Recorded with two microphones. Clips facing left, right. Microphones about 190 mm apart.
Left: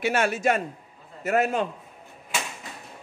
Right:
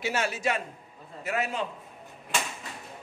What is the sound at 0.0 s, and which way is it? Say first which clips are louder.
A man's voice: left 5 dB; 55° left (ahead or behind).